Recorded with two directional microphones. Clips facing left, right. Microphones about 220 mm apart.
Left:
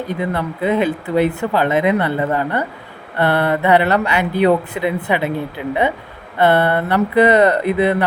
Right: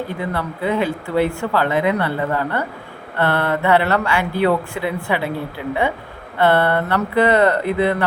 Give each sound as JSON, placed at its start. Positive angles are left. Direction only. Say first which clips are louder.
{"t": 0.1, "sound": "speech", "louder": "left 3 dB", "side_deg": 20}